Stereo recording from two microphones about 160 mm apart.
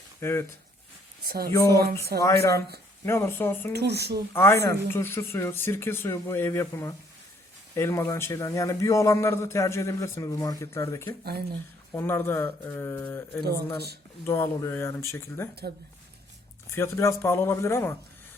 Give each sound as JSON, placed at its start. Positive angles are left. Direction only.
{"t": 0.2, "sound": "speech", "side_deg": 15}
{"t": 1.2, "sound": "speech", "side_deg": -70}
{"t": 1.5, "sound": "speech", "side_deg": 20}
{"t": 1.8, "sound": "speech", "side_deg": -75}
{"t": 3.1, "sound": "speech", "side_deg": 15}
{"t": 3.7, "sound": "speech", "side_deg": -90}
{"t": 4.4, "sound": "a man's voice", "side_deg": 15}
{"t": 16.6, "sound": "speech", "side_deg": 15}